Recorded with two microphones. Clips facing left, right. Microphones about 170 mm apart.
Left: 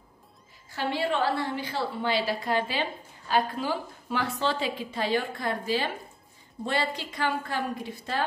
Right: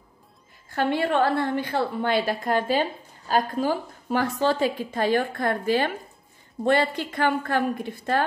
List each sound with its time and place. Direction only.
0.7 s a woman's voice: 55° right (ahead or behind)